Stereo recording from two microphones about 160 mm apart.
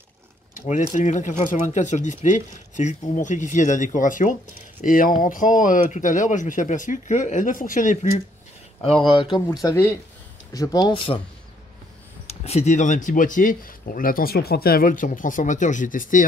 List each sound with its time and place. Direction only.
0.6 s speech: 50° left (ahead or behind)
9.2 s speech: 30° left (ahead or behind)
12.3 s speech: 40° left (ahead or behind)